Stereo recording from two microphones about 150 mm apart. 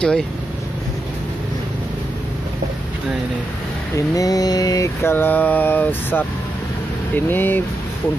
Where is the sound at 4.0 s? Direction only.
25° left (ahead or behind).